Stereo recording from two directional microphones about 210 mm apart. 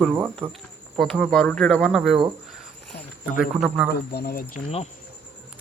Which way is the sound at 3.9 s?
50° left (ahead or behind).